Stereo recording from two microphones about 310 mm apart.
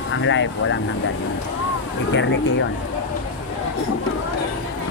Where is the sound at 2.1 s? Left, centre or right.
Left.